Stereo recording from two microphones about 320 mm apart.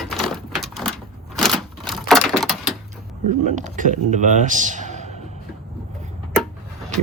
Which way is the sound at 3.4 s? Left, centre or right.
Right.